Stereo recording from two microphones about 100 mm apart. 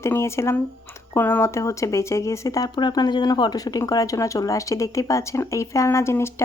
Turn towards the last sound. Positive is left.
turn(degrees=25)  # may be behind; listen again after turning